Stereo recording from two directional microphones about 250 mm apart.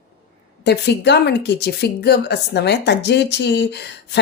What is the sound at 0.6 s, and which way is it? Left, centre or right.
A woman's voice, left.